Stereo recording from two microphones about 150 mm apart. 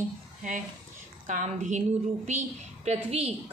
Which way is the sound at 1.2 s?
55° right (ahead or behind).